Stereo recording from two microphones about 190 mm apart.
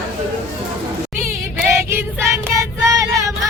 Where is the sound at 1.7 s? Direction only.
15° right (ahead or behind).